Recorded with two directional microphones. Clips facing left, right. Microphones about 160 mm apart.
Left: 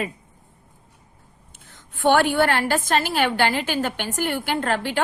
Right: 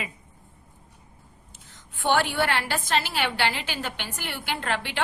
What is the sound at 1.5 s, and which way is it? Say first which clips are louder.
A woman's voice: left 4 dB; 55° left (ahead or behind).